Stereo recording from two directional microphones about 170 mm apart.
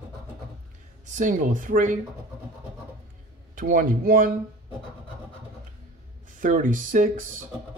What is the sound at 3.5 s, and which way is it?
Speech, 55° right (ahead or behind).